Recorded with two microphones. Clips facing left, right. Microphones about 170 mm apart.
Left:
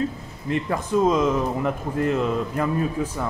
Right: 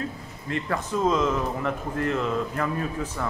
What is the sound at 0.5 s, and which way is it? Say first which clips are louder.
Speech: left 4 dB; 15° left (ahead or behind).